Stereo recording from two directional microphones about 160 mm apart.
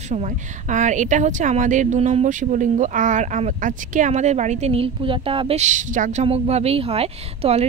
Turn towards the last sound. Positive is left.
turn(degrees=-40)  # may be behind; listen again after turning